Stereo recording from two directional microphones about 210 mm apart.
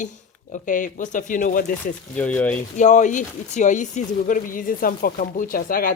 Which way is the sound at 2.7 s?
35° left (ahead or behind).